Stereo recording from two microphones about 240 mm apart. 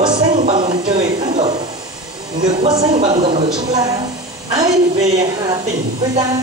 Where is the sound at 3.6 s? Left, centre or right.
Centre.